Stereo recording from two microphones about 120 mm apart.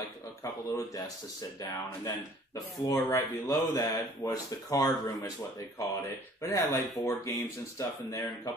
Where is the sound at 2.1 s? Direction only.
30° left (ahead or behind).